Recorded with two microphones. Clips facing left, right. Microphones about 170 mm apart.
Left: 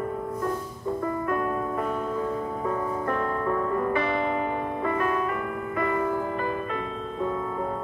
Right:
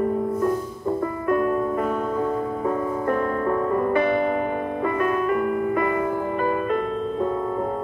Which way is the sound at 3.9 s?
50° right (ahead or behind).